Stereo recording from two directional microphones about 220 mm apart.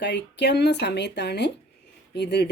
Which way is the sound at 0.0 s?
50° left (ahead or behind).